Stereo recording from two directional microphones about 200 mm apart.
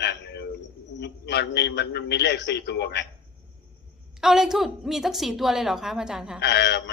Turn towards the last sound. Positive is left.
turn(degrees=55)  # may be behind; listen again after turning